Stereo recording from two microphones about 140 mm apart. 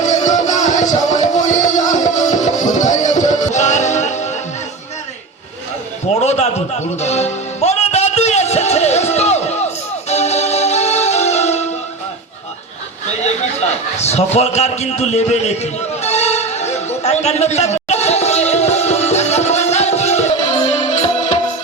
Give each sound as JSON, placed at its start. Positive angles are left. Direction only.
{"t": 0.0, "sound": "music", "side_deg": 60}
{"t": 6.1, "sound": "music", "side_deg": 50}
{"t": 13.9, "sound": "a sound", "side_deg": 50}